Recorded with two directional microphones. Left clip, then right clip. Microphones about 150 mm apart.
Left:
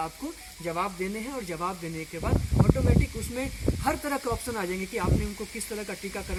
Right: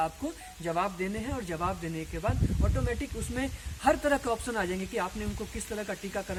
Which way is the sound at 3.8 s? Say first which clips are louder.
Right 4 dB; 30° right (ahead or behind).